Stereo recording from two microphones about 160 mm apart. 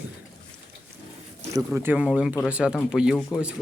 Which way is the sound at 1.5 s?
15° right (ahead or behind).